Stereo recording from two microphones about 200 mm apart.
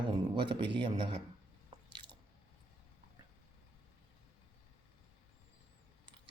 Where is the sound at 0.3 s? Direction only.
25° right (ahead or behind).